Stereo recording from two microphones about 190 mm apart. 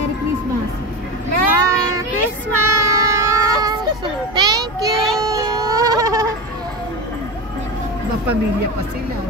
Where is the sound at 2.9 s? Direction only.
15° right (ahead or behind).